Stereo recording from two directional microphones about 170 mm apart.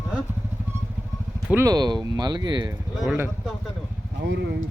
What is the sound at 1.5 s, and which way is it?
Speech, 15° right (ahead or behind).